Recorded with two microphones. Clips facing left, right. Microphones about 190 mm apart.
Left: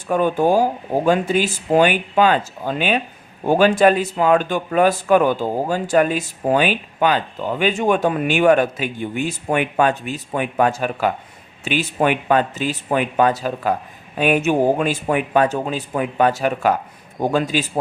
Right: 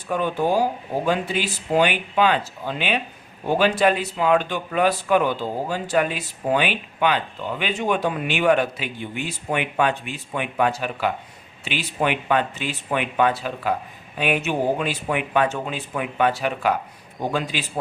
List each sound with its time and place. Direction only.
0.1 s speech: 45° left (ahead or behind)